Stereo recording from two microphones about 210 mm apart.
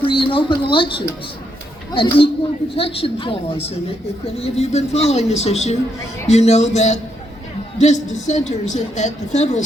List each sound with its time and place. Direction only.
0.0 s a woman's voice: 25° left (ahead or behind)